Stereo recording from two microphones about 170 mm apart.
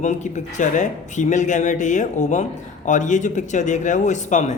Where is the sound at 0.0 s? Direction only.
45° left (ahead or behind).